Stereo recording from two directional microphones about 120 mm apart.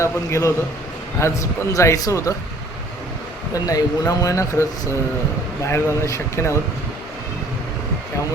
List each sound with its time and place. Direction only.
0.0 s speech: 25° left (ahead or behind)
3.5 s speech: 30° left (ahead or behind)